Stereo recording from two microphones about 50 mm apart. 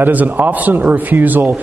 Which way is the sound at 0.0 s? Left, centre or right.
Right.